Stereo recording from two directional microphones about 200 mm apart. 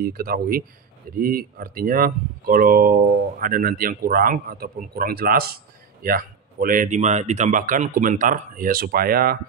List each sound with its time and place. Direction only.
0.0 s speech: 50° right (ahead or behind)